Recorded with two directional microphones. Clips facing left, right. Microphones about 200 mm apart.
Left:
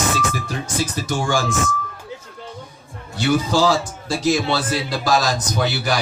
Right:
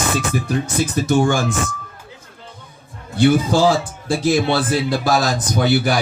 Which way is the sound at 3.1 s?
55° right (ahead or behind).